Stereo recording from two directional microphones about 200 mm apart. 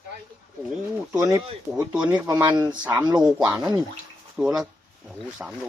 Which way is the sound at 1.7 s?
5° right (ahead or behind).